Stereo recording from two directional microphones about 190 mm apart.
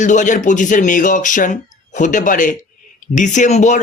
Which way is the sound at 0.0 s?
40° left (ahead or behind).